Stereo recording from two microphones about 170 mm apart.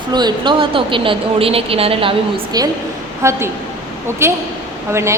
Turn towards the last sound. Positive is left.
turn(degrees=-15)  # may be behind; listen again after turning